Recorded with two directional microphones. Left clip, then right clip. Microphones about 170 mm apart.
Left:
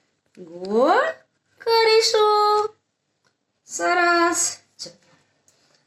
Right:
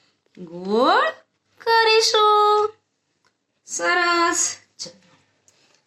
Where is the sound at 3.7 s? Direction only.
35° right (ahead or behind).